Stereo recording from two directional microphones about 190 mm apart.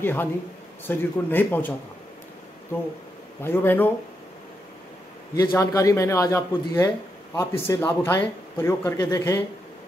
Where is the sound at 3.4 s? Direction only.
10° left (ahead or behind).